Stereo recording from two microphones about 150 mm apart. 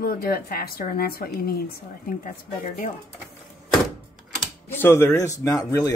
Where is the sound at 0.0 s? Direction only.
85° left.